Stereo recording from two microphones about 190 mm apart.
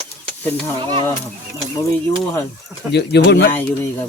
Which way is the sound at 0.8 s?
30° right (ahead or behind).